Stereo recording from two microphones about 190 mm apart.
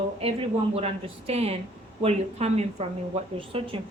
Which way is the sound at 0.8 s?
30° right (ahead or behind).